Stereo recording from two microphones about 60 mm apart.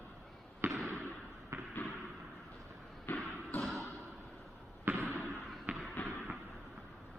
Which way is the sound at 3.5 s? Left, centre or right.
Left.